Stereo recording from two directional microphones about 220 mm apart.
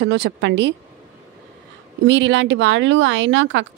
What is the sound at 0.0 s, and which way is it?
Speech, 55° right (ahead or behind).